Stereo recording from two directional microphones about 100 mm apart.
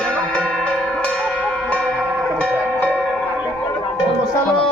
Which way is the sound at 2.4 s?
15° left (ahead or behind).